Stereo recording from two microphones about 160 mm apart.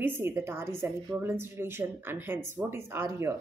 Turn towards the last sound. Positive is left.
turn(degrees=-15)  # may be behind; listen again after turning